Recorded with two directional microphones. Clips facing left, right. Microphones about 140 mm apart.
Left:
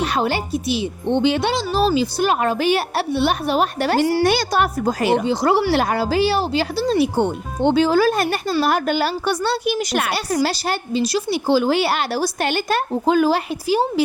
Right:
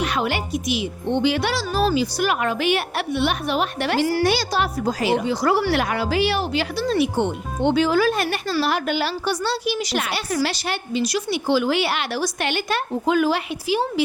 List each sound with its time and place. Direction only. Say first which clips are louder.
0.0 s a woman's voice: left 3 dB; 35° left (ahead or behind)
4.2 s a woman's voice: left 3 dB; 50° left (ahead or behind)
5.2 s a woman's voice: left 2 dB; 25° left (ahead or behind)